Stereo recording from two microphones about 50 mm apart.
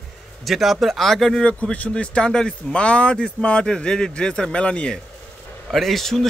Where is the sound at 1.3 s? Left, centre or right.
Left.